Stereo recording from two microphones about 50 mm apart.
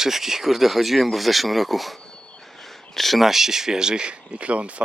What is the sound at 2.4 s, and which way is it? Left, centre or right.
Speech, centre.